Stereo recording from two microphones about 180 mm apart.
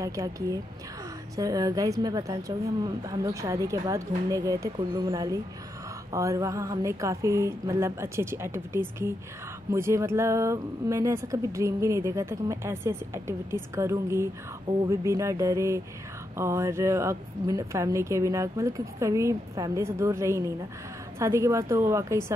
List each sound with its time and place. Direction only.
0.0 s a woman's voice: 20° right (ahead or behind)